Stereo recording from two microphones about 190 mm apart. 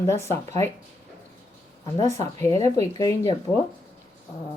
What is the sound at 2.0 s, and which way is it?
A woman's voice, 15° left (ahead or behind).